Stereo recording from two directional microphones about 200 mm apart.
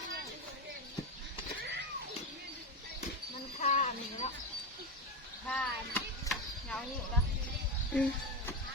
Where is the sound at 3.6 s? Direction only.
35° left (ahead or behind).